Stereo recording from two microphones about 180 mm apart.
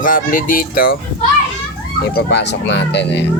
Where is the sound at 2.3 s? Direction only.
75° left (ahead or behind).